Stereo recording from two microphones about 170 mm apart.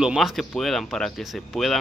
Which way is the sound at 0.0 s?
Centre (ahead or behind).